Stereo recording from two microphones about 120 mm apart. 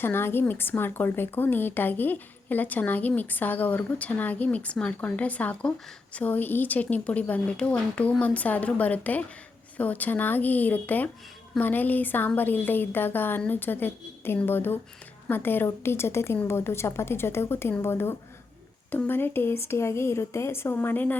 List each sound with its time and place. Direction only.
0.0 s a woman's voice: 20° left (ahead or behind)